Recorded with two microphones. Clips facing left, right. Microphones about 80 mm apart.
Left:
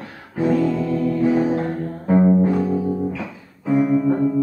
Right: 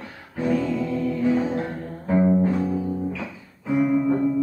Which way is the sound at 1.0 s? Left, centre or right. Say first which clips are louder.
Left 4 dB; left.